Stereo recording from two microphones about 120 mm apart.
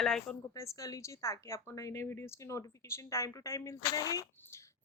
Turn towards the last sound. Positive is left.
turn(degrees=30)  # may be behind; listen again after turning